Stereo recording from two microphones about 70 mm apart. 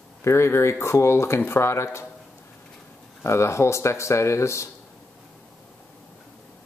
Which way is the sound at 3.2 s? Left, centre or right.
Left.